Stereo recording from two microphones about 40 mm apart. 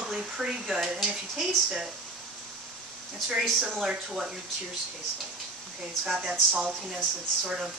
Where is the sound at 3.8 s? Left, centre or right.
Centre.